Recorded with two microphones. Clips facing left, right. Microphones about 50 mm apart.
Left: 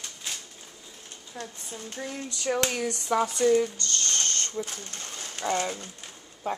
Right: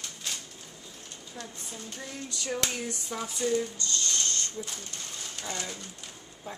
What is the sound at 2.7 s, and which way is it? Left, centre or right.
Speech, left.